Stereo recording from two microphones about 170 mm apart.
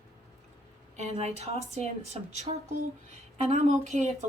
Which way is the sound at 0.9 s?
40° right (ahead or behind).